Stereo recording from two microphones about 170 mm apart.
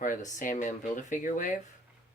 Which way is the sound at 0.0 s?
50° left (ahead or behind).